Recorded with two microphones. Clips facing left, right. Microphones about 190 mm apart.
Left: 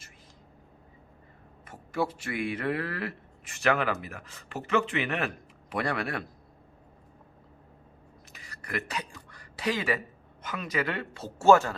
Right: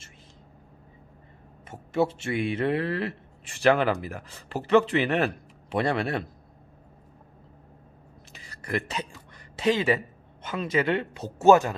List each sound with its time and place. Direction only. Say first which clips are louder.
1.6 s speech: right 5 dB; 25° right (ahead or behind)
8.3 s a sound: right 6 dB; 25° right (ahead or behind)
10.4 s speech: right 5 dB; 25° right (ahead or behind)